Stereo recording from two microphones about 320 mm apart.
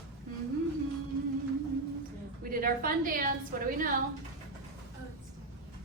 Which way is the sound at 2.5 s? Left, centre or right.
Right.